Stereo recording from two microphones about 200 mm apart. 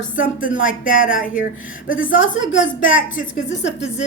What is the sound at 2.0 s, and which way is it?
Speech, 75° left (ahead or behind).